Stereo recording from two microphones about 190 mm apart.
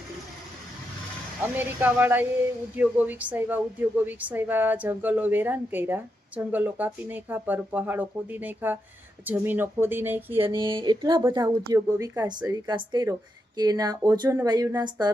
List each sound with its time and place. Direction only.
1.4 s a woman's voice: 10° right (ahead or behind)
10.4 s a woman's voice: 25° right (ahead or behind)